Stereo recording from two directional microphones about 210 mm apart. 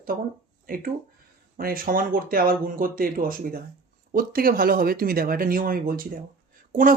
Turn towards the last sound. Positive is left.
turn(degrees=-40)  # may be behind; listen again after turning